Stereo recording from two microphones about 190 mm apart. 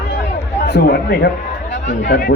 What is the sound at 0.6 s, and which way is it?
Speech, 60° left (ahead or behind).